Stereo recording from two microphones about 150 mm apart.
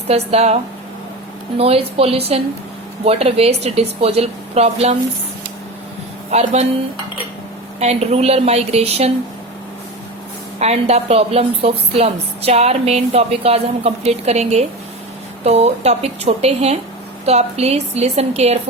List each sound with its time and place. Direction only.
0.1 s a woman's voice: 45° right (ahead or behind)
6.3 s a woman's voice: 45° right (ahead or behind)
7.8 s a woman's voice: 45° right (ahead or behind)
10.6 s a woman's voice: 45° right (ahead or behind)